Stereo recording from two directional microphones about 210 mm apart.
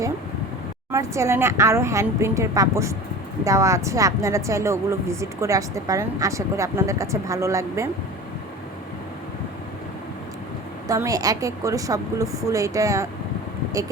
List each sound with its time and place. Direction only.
0.9 s a woman's voice: 15° right (ahead or behind)
10.8 s a woman's voice: 15° right (ahead or behind)